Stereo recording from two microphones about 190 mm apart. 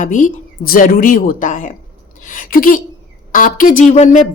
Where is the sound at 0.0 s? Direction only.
45° left (ahead or behind).